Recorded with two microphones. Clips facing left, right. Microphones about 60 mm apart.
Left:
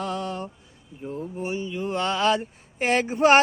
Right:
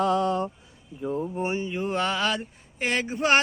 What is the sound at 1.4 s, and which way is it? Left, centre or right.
Speech, right.